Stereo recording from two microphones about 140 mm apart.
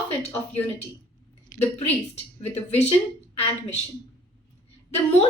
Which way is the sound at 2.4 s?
50° left (ahead or behind).